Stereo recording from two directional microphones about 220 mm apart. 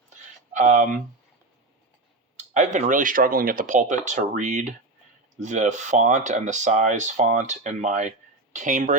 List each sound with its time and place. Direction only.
0.5 s speech: 35° right (ahead or behind)
2.3 s speech: 35° right (ahead or behind)